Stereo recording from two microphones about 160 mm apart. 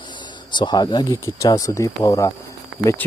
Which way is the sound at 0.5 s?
30° left (ahead or behind).